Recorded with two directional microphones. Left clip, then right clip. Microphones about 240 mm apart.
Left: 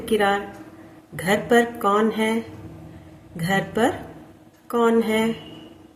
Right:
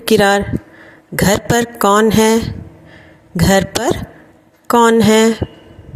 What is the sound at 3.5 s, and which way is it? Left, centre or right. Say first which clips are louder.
Speech: right 7 dB; right.